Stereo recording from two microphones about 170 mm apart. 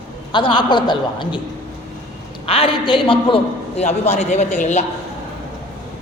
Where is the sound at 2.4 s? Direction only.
35° left (ahead or behind).